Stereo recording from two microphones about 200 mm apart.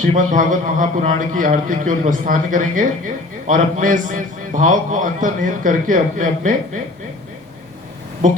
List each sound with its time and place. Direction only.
0.0 s a man's voice: 40° right (ahead or behind)